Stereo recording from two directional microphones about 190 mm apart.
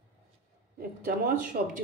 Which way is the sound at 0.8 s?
45° right (ahead or behind).